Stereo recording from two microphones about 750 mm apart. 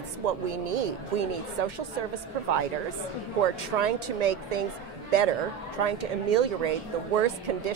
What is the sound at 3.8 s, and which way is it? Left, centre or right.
Speech, right.